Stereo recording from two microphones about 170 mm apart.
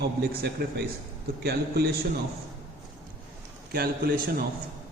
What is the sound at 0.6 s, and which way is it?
A man's voice, 65° right (ahead or behind).